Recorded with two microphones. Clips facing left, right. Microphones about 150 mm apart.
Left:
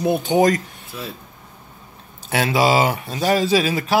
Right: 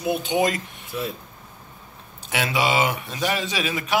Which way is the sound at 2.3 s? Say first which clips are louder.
Left 5 dB; 40° left (ahead or behind).